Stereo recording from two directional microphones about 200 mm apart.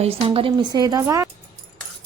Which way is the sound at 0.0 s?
30° right (ahead or behind).